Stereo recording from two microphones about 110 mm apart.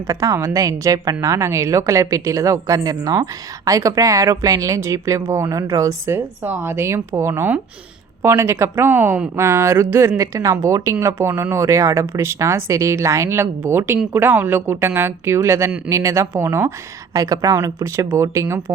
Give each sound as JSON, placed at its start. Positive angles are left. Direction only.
{"t": 0.1, "sound": "speech", "side_deg": -30}